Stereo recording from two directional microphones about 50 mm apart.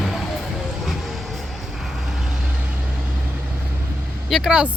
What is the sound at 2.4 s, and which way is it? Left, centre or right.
Vehicle, right.